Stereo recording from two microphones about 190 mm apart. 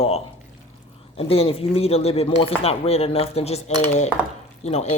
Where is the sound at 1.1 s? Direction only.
30° left (ahead or behind).